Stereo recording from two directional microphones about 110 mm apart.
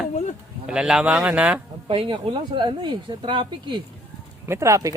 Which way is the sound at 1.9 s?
50° right (ahead or behind).